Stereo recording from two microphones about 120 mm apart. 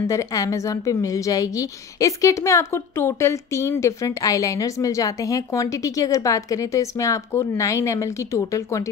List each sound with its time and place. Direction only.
0.1 s a woman's voice: 25° left (ahead or behind)